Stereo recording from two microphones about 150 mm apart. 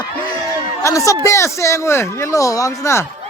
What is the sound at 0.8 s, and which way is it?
Speech, 20° left (ahead or behind).